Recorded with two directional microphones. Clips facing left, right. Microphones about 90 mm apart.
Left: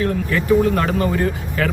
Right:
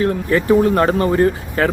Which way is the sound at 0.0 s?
35° right (ahead or behind).